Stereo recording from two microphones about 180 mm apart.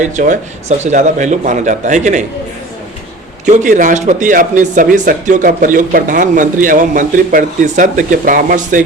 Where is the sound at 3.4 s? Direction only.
45° right (ahead or behind).